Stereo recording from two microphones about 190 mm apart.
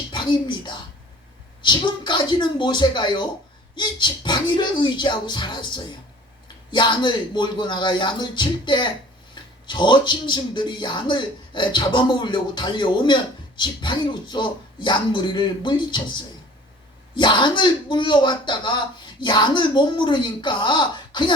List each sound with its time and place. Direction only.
0.1 s speech: 25° left (ahead or behind)